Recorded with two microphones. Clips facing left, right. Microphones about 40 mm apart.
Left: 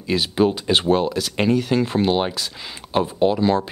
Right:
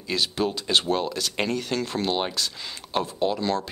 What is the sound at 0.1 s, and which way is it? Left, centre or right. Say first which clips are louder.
Speech: left 7 dB; centre.